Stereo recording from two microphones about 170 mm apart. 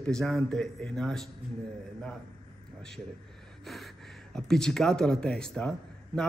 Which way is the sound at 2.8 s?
5° left (ahead or behind).